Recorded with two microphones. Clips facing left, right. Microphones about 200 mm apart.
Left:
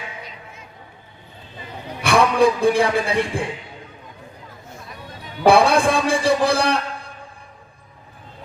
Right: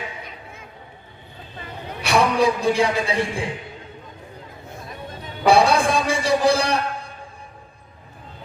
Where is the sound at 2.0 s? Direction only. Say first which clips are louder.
Left 3 dB; 55° left (ahead or behind).